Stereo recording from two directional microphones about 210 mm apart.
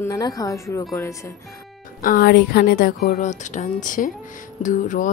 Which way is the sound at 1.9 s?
45° left (ahead or behind).